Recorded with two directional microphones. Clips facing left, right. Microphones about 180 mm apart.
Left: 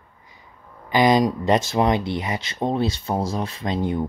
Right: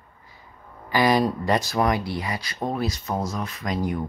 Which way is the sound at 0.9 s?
20° left (ahead or behind).